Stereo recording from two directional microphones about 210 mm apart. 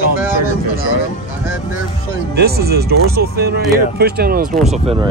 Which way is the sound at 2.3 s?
50° right (ahead or behind).